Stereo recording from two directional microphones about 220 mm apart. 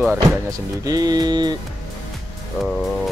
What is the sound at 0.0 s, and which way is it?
Speech, 5° right (ahead or behind).